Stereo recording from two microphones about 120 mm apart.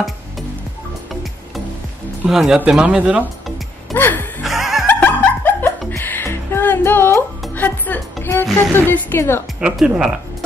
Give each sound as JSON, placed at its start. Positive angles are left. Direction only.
{"t": 2.2, "sound": "speech", "side_deg": -5}
{"t": 3.9, "sound": "music", "side_deg": 15}
{"t": 4.4, "sound": "music", "side_deg": 0}
{"t": 4.8, "sound": "snicker", "side_deg": 15}
{"t": 5.9, "sound": "music", "side_deg": 15}
{"t": 8.7, "sound": "speech", "side_deg": 15}
{"t": 9.6, "sound": "speech", "side_deg": -5}